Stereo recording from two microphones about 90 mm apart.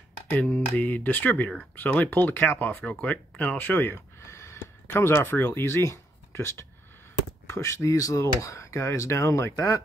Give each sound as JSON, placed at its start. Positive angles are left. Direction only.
{"t": 0.3, "sound": "speech", "side_deg": 20}